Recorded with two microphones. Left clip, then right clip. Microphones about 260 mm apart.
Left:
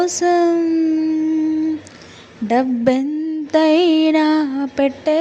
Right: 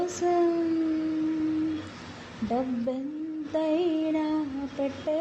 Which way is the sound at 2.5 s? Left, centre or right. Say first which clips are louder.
Left 14 dB; left.